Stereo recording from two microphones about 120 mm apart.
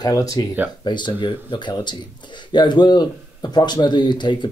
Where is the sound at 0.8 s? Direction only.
40° left (ahead or behind).